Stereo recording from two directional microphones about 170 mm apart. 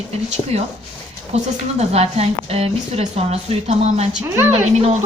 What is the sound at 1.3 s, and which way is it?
A woman's voice, 40° right (ahead or behind).